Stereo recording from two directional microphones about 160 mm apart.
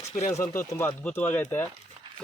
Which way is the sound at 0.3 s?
20° left (ahead or behind).